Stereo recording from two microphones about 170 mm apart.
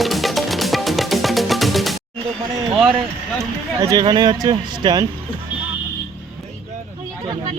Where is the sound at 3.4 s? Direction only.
20° right (ahead or behind).